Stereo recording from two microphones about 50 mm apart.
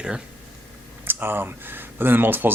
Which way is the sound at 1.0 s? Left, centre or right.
Right.